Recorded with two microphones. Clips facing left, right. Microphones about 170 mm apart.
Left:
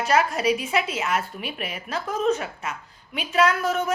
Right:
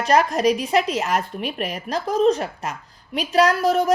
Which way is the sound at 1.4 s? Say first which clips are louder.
Right 6 dB; 5° left (ahead or behind).